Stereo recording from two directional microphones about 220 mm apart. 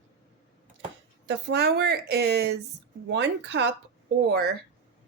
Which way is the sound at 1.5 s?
50° right (ahead or behind).